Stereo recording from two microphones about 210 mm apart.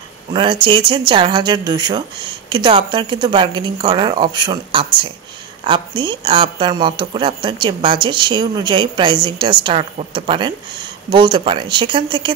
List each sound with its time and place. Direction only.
0.3 s speech: 25° right (ahead or behind)